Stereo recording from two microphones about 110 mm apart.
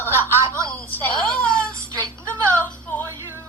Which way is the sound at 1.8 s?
25° right (ahead or behind).